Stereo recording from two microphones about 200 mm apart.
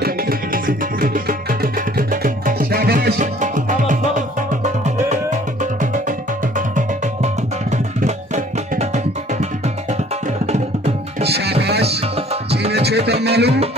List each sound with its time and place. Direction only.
0.0 s tabla: 45° right (ahead or behind)
3.2 s music: 40° right (ahead or behind)
8.7 s music: 35° right (ahead or behind)
11.2 s music: 55° right (ahead or behind)